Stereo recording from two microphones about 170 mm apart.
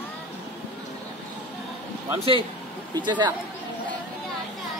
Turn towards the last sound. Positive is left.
turn(degrees=-25)  # may be behind; listen again after turning